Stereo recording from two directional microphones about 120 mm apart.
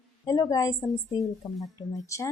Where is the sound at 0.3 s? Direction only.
30° left (ahead or behind).